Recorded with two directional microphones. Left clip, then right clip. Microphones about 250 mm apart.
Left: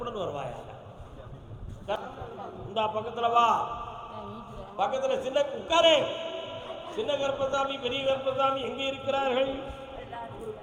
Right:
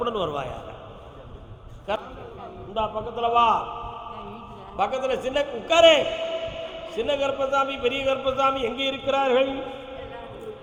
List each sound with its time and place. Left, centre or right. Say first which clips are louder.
0.0 s a man's voice: right 7 dB; centre
1.9 s a man's voice: right 4 dB; centre
2.7 s a man's voice: right 2 dB; right
4.8 s a man's voice: right 3 dB; right